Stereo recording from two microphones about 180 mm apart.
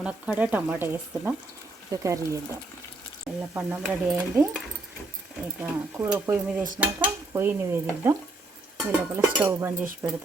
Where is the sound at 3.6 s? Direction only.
10° right (ahead or behind).